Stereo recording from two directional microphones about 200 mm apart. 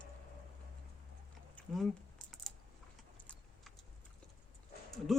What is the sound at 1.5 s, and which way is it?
Typing, centre (ahead or behind).